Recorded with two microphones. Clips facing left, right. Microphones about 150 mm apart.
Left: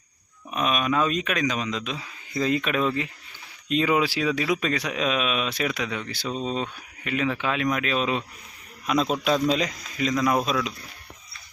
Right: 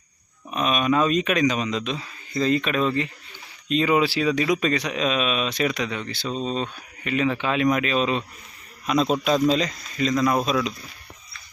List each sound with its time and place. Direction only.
0.5 s a man's voice: 5° left (ahead or behind)